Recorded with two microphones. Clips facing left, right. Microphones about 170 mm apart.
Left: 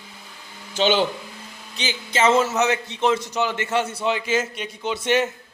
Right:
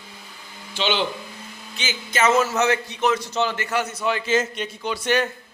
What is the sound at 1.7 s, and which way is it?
A man's voice, 35° left (ahead or behind).